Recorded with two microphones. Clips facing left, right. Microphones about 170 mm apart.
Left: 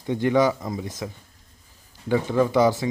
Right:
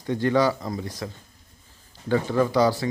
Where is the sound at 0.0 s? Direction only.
15° left (ahead or behind).